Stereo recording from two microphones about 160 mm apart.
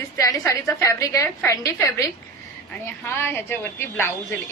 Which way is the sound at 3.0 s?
15° left (ahead or behind).